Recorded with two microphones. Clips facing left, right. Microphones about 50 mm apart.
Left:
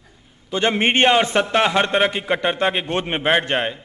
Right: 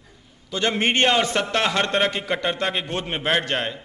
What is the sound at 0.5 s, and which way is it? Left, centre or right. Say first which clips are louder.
A man's voice: left 3 dB; left.